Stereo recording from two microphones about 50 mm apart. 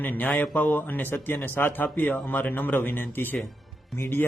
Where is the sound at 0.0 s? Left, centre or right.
Left.